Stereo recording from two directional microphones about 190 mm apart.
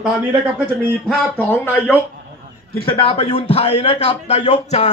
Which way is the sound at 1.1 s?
5° left (ahead or behind).